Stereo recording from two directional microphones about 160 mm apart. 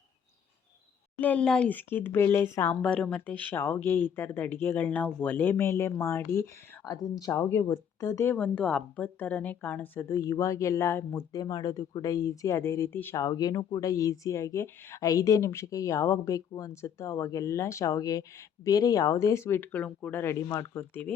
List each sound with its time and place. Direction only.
1.2 s speech: 10° left (ahead or behind)